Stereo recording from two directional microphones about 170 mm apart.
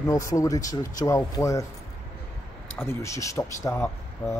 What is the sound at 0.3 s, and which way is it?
Speech, 20° left (ahead or behind).